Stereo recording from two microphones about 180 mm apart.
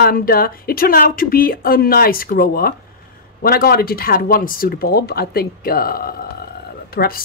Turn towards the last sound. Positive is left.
turn(degrees=55)  # may be behind; listen again after turning